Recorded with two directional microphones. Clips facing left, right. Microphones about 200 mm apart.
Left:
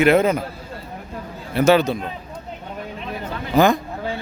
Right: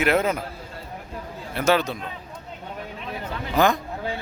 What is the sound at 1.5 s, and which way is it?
Speech, 5° left (ahead or behind).